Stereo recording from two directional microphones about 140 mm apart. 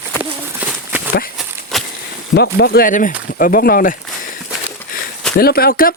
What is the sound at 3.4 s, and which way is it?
Speech, 90° left.